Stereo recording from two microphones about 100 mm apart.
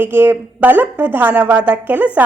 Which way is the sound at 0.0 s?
20° right (ahead or behind).